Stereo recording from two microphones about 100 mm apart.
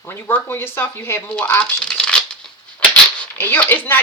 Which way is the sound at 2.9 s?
20° left (ahead or behind).